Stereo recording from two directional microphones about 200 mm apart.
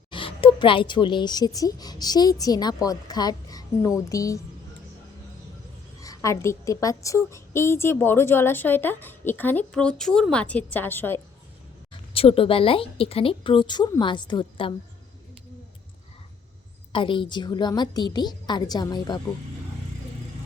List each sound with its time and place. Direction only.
0.1 s a woman's voice: 25° left (ahead or behind)
6.0 s a woman's voice: 15° left (ahead or behind)
12.1 s a woman's voice: 30° left (ahead or behind)
16.9 s a woman's voice: 25° left (ahead or behind)